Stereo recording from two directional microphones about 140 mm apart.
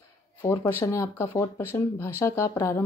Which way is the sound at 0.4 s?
20° left (ahead or behind).